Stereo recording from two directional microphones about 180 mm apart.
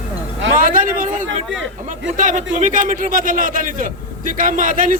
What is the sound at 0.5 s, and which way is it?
Vehicle, 50° right (ahead or behind).